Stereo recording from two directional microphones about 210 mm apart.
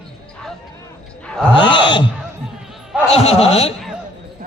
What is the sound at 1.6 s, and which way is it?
Speech, 20° left (ahead or behind).